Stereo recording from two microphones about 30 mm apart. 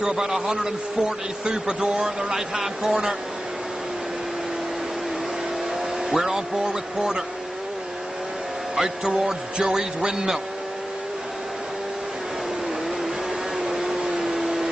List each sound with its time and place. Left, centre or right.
0.0 s a man's voice: centre
2.0 s speech: centre
6.0 s speech: centre
8.7 s speech: centre
13.6 s a sound: centre